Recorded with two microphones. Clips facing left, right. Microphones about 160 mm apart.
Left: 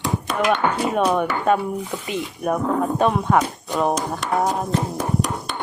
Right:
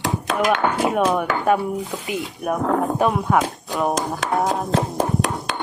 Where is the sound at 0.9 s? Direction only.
5° right (ahead or behind).